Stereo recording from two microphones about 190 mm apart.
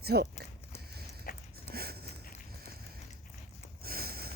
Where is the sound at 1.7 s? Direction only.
55° right (ahead or behind).